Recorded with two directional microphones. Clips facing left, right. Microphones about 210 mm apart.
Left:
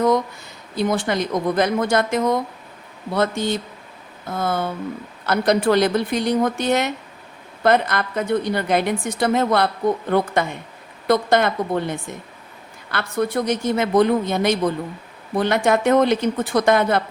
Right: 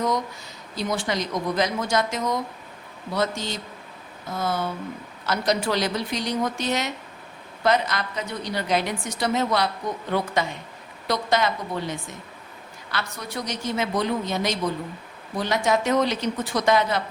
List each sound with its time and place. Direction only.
0.8 s a woman's voice: 55° left (ahead or behind)